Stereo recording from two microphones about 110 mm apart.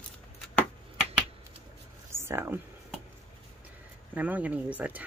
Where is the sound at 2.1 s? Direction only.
25° right (ahead or behind).